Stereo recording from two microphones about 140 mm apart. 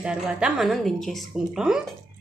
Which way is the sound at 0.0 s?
5° right (ahead or behind).